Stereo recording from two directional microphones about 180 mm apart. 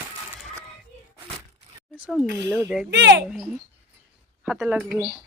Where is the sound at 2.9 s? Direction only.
75° right (ahead or behind).